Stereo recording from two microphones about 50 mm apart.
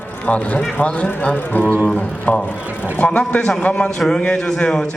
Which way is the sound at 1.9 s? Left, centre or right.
Left.